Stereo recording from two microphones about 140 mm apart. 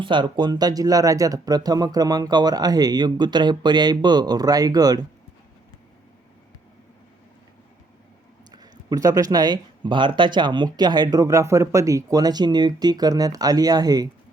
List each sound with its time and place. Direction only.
0.0 s speech: 35° right (ahead or behind)
8.5 s speech: 30° right (ahead or behind)